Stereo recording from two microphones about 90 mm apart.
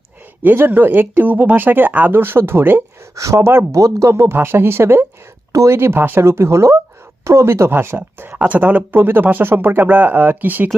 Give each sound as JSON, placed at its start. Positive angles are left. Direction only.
{"t": 0.4, "sound": "speech", "side_deg": -25}